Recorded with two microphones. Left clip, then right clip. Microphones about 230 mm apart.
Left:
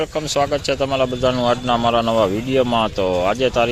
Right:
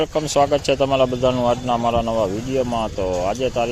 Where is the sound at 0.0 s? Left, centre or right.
Centre.